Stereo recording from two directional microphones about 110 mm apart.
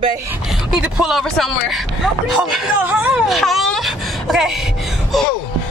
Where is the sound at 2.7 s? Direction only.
15° right (ahead or behind).